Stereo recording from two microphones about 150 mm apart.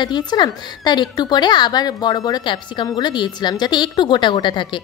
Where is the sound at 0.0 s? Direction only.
30° left (ahead or behind).